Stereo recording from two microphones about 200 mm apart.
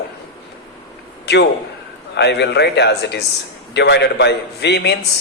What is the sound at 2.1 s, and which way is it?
A man's voice, 55° left (ahead or behind).